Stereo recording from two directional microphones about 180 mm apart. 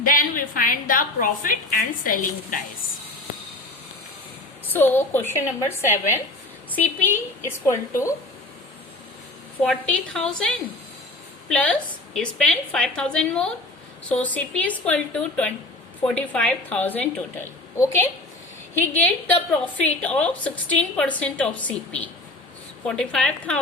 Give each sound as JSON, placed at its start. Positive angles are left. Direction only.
{"t": 0.0, "sound": "a woman's voice", "side_deg": 50}
{"t": 4.6, "sound": "a woman's voice", "side_deg": 10}
{"t": 9.6, "sound": "a woman's voice", "side_deg": 5}